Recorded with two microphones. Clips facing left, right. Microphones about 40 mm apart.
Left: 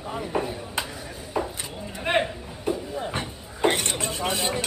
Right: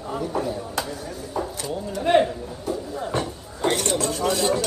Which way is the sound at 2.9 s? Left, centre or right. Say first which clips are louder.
Right 3 dB; left.